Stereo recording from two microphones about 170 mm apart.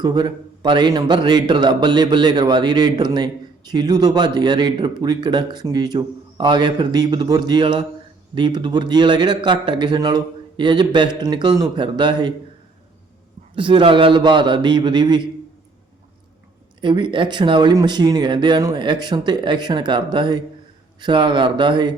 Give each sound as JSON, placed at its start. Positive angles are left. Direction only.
{"t": 0.0, "sound": "a man's voice", "side_deg": -25}
{"t": 13.6, "sound": "a man's voice", "side_deg": -30}
{"t": 16.8, "sound": "a man's voice", "side_deg": -25}